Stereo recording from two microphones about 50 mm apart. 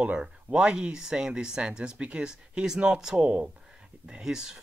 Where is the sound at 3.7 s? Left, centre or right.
Centre.